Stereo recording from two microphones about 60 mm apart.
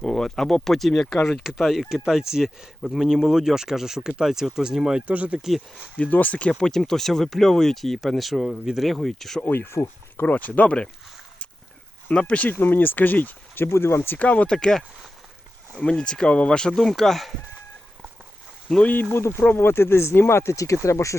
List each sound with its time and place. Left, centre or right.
0.0 s speech: centre
5.0 s speech: right
5.4 s speech: centre
6.0 s speech: left
6.5 s speech: centre
9.5 s speech: left
10.2 s speech: left
12.1 s speech: left
12.5 s speech: left
13.7 s speech: left
14.2 s speech: left
15.8 s speech: centre
18.8 s speech: left